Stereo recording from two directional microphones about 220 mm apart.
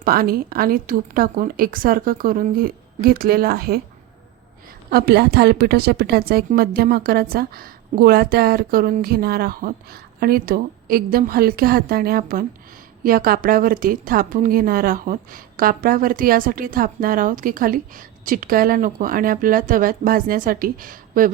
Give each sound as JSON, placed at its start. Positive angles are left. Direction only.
{"t": 0.0, "sound": "a woman's voice", "side_deg": -40}
{"t": 4.9, "sound": "a woman's voice", "side_deg": -45}